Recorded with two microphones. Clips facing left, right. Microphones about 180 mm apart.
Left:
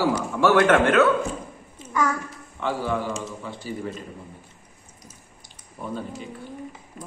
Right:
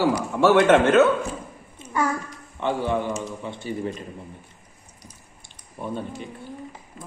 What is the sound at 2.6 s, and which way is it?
A man's voice, 20° right (ahead or behind).